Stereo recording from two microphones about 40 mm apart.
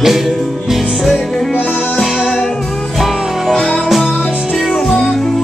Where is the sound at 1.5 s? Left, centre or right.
Left.